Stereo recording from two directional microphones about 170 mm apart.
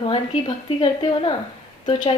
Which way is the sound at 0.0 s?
30° left (ahead or behind).